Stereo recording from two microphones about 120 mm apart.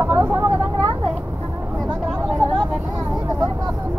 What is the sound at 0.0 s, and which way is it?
Vehicle, 20° right (ahead or behind).